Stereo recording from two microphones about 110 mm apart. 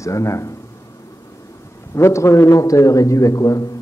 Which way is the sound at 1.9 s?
25° left (ahead or behind).